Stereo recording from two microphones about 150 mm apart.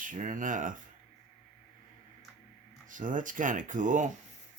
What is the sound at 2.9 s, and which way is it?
Speech, 60° right (ahead or behind).